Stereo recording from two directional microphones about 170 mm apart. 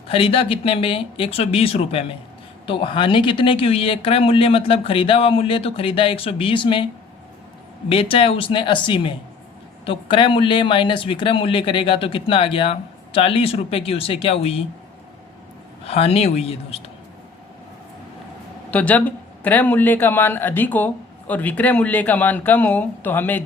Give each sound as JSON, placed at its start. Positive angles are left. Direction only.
{"t": 0.1, "sound": "speech", "side_deg": 35}
{"t": 7.9, "sound": "speech", "side_deg": 35}
{"t": 15.9, "sound": "speech", "side_deg": 35}
{"t": 18.7, "sound": "a man's voice", "side_deg": 10}